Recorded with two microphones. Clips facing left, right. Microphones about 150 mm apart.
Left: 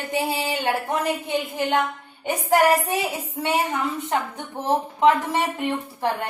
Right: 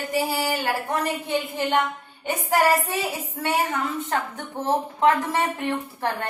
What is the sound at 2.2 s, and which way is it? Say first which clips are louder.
Speech: left 2 dB; 15° left (ahead or behind).